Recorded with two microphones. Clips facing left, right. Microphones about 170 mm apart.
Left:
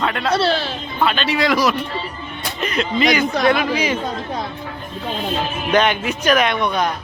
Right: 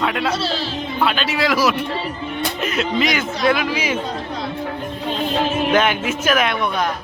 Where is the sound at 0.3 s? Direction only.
65° left (ahead or behind).